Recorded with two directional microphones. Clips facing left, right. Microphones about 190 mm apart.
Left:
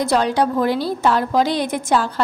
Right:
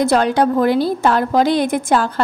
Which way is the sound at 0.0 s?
55° right (ahead or behind).